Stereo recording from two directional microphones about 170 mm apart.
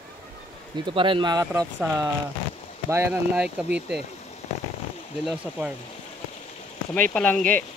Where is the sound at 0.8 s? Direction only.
30° right (ahead or behind).